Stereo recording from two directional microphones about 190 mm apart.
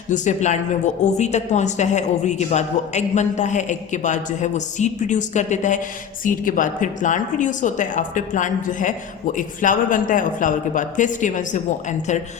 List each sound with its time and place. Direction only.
0.1 s a woman's voice: 40° left (ahead or behind)